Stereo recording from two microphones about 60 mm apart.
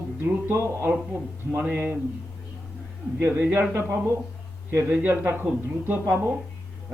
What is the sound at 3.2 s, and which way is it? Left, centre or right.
A woman's voice, right.